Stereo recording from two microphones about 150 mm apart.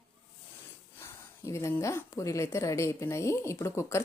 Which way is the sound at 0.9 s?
15° left (ahead or behind).